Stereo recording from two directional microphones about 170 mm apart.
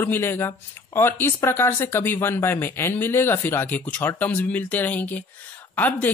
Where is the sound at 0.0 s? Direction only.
15° left (ahead or behind).